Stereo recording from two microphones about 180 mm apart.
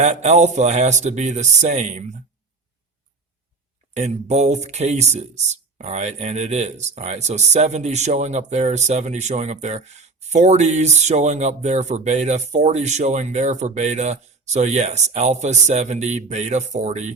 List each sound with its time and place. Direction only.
0.0 s speech: 40° right (ahead or behind)
3.9 s speech: 40° right (ahead or behind)